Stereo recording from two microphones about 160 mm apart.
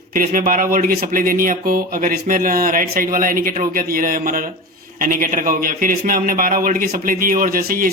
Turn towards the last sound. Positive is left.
turn(degrees=-60)  # may be behind; listen again after turning